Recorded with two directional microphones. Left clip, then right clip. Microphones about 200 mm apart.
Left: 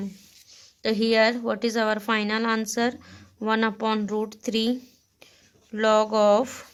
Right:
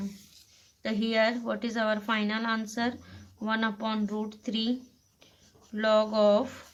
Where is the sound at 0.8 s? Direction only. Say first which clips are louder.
Left 6 dB; 45° left (ahead or behind).